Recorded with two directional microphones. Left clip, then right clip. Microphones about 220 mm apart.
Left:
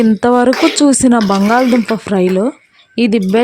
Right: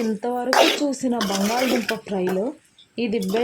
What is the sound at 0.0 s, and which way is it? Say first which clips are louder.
Speech: left 14 dB; 45° left (ahead or behind).